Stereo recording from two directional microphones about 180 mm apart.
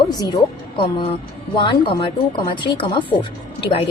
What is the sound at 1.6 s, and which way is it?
A woman's voice, 30° left (ahead or behind).